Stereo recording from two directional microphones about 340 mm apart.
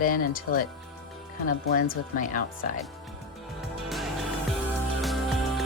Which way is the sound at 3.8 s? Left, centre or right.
Centre.